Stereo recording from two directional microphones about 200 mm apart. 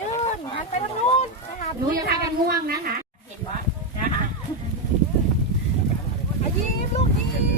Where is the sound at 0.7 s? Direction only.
35° left (ahead or behind).